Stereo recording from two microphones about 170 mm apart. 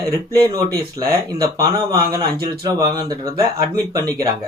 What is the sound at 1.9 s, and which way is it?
Speech, 20° right (ahead or behind).